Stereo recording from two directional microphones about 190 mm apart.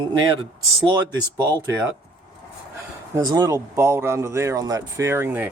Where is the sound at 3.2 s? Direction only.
20° right (ahead or behind).